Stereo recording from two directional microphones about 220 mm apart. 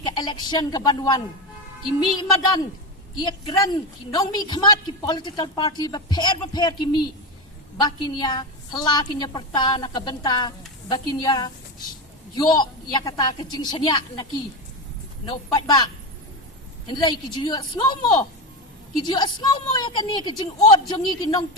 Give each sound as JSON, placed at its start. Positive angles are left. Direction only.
{"t": 0.0, "sound": "a woman's voice", "side_deg": 20}